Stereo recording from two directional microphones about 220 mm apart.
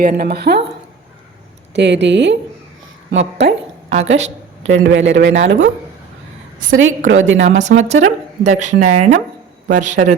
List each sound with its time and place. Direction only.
0.0 s speech: 45° right (ahead or behind)
1.7 s a man's voice: 50° right (ahead or behind)
3.8 s a sound: 30° right (ahead or behind)
4.8 s a man's voice: 50° right (ahead or behind)
6.7 s a man's voice: 60° right (ahead or behind)
7.7 s speech: 40° right (ahead or behind)